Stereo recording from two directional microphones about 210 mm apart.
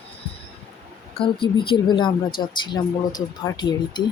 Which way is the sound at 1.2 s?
25° left (ahead or behind).